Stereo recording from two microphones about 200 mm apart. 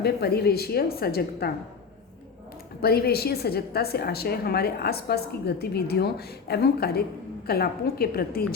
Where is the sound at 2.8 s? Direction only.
50° left (ahead or behind).